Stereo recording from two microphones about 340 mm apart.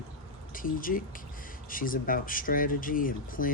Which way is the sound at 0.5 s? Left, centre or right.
Left.